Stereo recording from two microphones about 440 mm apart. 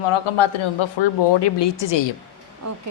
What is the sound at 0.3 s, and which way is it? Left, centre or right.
A woman's voice, left.